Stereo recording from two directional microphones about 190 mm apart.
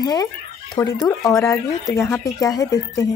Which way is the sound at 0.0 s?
20° left (ahead or behind).